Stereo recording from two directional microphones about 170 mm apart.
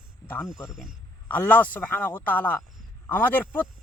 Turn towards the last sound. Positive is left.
turn(degrees=10)  # may be behind; listen again after turning